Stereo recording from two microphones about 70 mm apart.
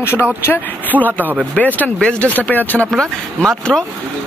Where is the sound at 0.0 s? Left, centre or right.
Left.